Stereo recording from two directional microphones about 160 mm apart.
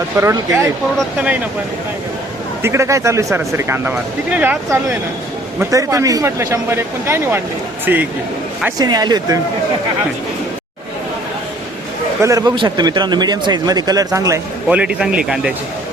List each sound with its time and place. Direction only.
0.2 s speech: 20° right (ahead or behind)
2.6 s speech: 15° right (ahead or behind)
5.5 s speech: 20° right (ahead or behind)
8.8 s a man's voice: 25° right (ahead or behind)
12.2 s a man's voice: 20° right (ahead or behind)
14.7 s speech: 5° right (ahead or behind)